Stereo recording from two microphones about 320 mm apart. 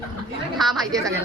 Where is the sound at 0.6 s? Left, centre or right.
Centre.